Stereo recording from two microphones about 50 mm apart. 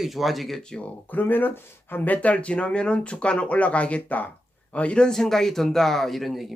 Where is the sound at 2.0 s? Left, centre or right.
Left.